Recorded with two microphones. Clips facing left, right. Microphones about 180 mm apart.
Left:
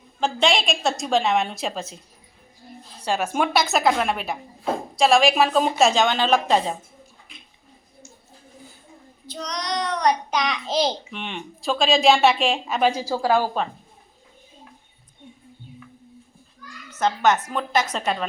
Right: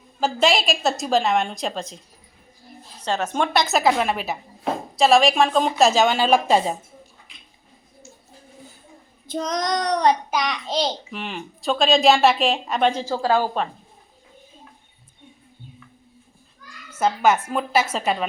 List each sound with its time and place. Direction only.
0.2 s a child's voice: 5° right (ahead or behind)
3.0 s a child's voice: 10° left (ahead or behind); by 6.7 s 10° right (ahead or behind)
9.2 s child singing: 50° right (ahead or behind); by 10.2 s 35° right (ahead or behind)
10.3 s a child's voice: centre (ahead or behind)
16.9 s a woman's voice: 10° right (ahead or behind)